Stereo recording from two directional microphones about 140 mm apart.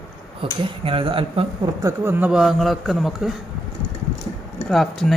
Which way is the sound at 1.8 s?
15° right (ahead or behind).